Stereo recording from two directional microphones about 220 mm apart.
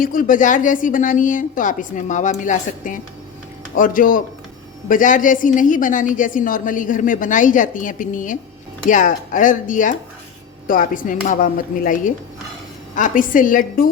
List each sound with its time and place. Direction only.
0.0 s a woman's voice: 40° left (ahead or behind)